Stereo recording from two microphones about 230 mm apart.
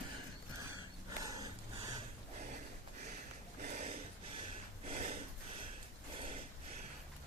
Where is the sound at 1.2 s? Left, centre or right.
Centre.